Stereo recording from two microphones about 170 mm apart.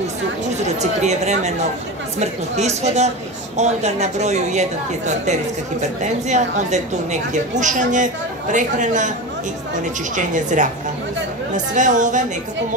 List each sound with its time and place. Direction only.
0.7 s a woman's voice: 40° right (ahead or behind)
10.1 s a woman's voice: 45° right (ahead or behind)